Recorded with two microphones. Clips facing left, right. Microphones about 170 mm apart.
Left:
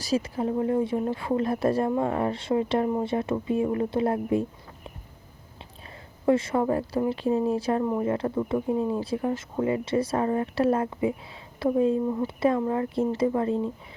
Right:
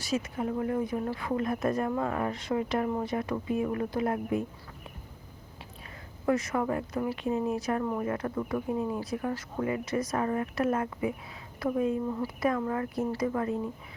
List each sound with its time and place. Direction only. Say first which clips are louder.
0.0 s speech: left 5 dB; 35° left (ahead or behind)
6.2 s speech: left 5 dB; 30° left (ahead or behind)